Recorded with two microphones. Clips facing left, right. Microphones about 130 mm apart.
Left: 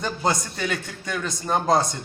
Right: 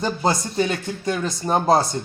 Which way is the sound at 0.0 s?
25° right (ahead or behind).